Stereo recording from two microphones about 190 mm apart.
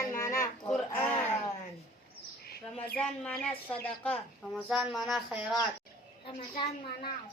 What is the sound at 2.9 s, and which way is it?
Speech, 5° left (ahead or behind).